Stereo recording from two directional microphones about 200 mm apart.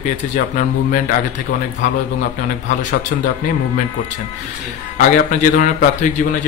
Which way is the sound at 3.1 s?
45° left (ahead or behind).